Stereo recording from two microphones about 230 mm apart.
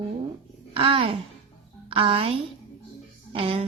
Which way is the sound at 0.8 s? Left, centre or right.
Right.